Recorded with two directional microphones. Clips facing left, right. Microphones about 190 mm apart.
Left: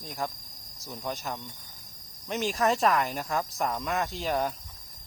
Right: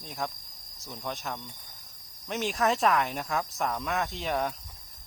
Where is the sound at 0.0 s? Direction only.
Centre (ahead or behind).